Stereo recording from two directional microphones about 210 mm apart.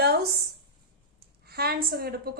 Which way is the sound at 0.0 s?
50° right (ahead or behind).